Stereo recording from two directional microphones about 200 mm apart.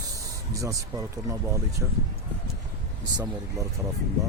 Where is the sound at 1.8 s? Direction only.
5° right (ahead or behind).